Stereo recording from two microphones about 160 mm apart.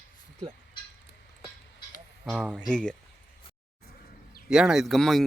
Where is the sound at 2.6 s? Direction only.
5° left (ahead or behind).